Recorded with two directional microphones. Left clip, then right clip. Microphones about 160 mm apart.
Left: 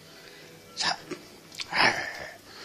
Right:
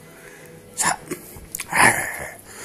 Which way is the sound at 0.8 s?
Centre (ahead or behind).